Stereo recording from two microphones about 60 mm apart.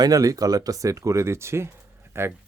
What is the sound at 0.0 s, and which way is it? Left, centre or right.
Speech, right.